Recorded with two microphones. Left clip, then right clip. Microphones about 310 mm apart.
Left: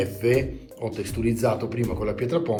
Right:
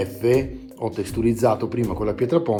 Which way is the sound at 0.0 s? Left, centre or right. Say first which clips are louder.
Right 2 dB; centre.